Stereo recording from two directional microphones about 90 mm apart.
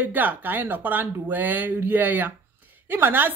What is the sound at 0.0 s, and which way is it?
Speech, 20° right (ahead or behind).